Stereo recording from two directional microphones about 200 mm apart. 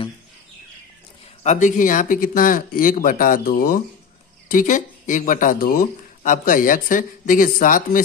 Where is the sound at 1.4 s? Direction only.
35° left (ahead or behind).